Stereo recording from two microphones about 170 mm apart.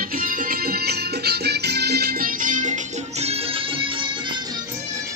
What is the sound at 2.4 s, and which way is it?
Music, 50° right (ahead or behind).